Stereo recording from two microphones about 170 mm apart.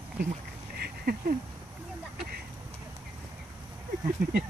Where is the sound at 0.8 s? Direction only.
60° right (ahead or behind).